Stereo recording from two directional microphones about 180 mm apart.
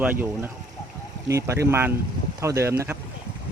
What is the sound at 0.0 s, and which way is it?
Speech, 10° right (ahead or behind).